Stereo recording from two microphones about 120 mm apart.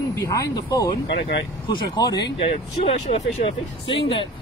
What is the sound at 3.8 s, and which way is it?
Speech, 45° left (ahead or behind).